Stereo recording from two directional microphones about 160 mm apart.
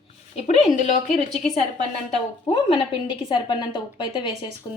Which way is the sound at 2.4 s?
35° left (ahead or behind).